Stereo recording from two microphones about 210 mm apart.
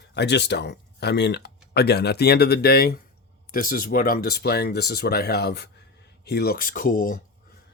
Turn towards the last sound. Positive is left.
turn(degrees=40)  # may be behind; listen again after turning